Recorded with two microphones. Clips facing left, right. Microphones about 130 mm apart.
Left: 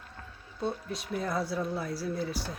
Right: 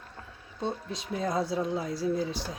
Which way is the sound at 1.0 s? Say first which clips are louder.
Right 3 dB; 15° right (ahead or behind).